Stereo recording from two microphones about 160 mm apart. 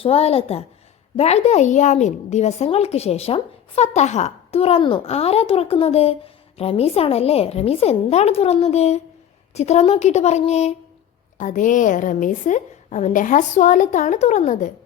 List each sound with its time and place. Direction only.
0.0 s a woman's voice: 40° left (ahead or behind)
11.3 s a woman's voice: 55° left (ahead or behind)